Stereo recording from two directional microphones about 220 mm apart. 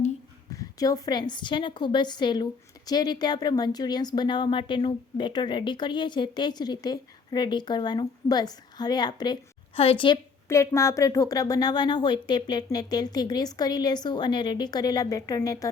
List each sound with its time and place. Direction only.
0.5 s a woman's voice: 15° left (ahead or behind)